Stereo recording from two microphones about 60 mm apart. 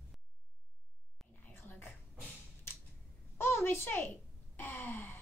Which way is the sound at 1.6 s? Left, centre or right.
Left.